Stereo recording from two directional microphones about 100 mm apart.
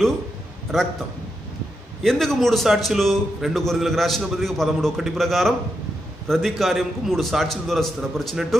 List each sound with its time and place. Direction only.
2.0 s a man's voice: 5° left (ahead or behind)